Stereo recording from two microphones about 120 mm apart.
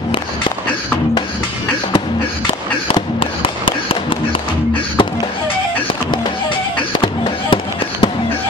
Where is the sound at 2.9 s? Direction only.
50° left (ahead or behind).